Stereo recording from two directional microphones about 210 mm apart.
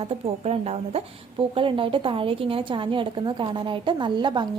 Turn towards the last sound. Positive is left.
turn(degrees=-20)  # may be behind; listen again after turning